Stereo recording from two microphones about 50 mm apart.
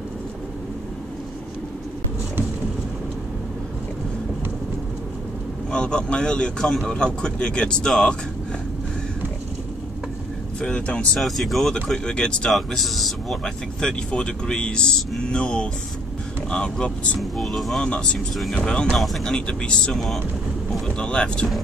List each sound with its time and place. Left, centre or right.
5.7 s speech: centre
11.1 s speech: centre
11.7 s speech: centre
12.4 s speech: centre
13.4 s speech: centre
17.2 s speech: centre
17.7 s speech: centre
19.9 s speech: centre
20.8 s speech: centre